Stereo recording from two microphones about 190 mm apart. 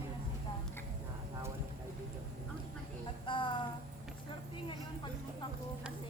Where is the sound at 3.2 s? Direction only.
25° left (ahead or behind).